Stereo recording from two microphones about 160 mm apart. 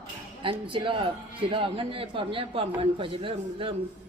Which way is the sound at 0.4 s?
35° right (ahead or behind).